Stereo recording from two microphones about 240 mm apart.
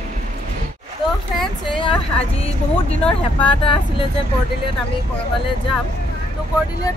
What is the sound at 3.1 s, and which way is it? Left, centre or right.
Speech, left.